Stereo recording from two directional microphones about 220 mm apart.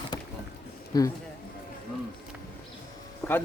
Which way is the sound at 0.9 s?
15° left (ahead or behind).